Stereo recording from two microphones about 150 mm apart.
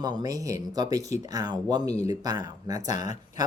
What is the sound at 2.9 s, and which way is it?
Speech, 55° left (ahead or behind).